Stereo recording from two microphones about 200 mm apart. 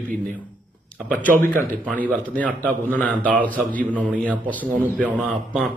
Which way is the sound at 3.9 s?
5° right (ahead or behind).